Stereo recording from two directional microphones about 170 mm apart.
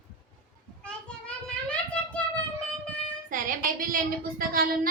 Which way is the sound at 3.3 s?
55° right (ahead or behind).